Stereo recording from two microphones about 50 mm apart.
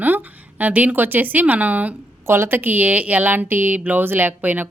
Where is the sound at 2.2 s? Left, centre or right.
Right.